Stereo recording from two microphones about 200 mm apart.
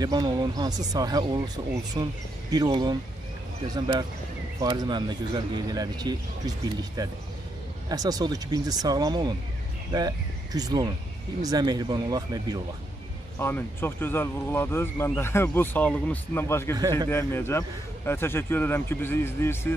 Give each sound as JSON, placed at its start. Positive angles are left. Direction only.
{"t": 0.0, "sound": "speech", "side_deg": -20}
{"t": 13.4, "sound": "speech", "side_deg": 10}